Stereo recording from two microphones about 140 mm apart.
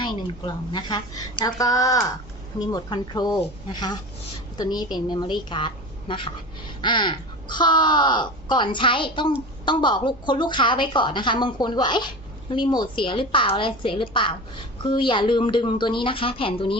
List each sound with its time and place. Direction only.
0.0 s a woman's voice: 35° left (ahead or behind)